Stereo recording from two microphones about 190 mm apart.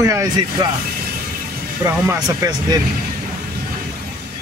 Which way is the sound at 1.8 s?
15° right (ahead or behind).